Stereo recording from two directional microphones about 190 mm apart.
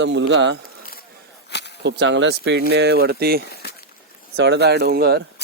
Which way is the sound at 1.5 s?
60° left (ahead or behind).